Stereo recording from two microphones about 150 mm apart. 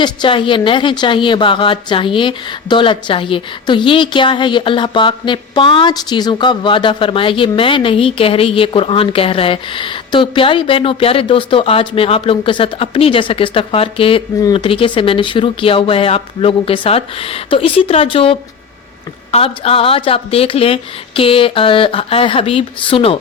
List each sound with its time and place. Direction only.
0.0 s a woman's voice: 30° left (ahead or behind)